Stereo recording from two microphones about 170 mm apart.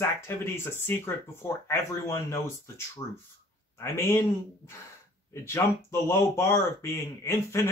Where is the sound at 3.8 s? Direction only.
15° left (ahead or behind).